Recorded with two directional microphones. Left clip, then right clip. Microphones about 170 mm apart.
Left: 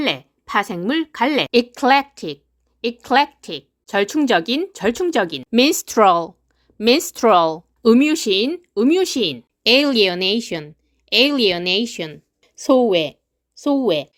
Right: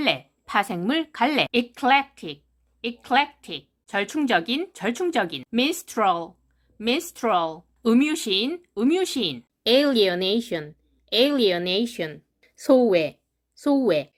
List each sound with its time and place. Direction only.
0.0 s a woman's voice: 20° left (ahead or behind)
1.5 s a woman's voice: 45° left (ahead or behind)
5.5 s a woman's voice: 55° left (ahead or behind)
7.8 s speech: 35° left (ahead or behind)
9.6 s a woman's voice: 50° left (ahead or behind)